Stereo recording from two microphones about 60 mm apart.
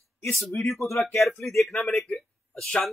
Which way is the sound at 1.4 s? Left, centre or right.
Centre.